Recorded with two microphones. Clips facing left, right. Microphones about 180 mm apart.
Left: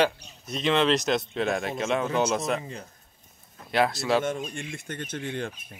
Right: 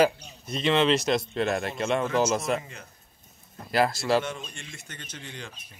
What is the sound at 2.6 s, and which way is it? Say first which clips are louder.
Speech: left 4 dB; 35° left (ahead or behind).